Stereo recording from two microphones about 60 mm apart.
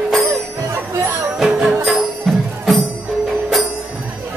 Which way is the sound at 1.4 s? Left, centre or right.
Centre.